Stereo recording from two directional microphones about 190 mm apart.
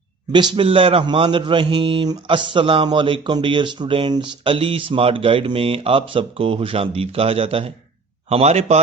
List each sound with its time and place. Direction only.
0.3 s a man's voice: 25° right (ahead or behind)